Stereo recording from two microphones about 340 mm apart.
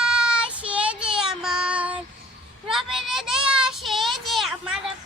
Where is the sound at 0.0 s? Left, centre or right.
Centre.